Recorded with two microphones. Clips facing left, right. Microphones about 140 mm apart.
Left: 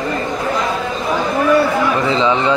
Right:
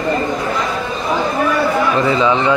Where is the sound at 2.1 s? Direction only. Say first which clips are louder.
Right 1 dB; 20° left (ahead or behind).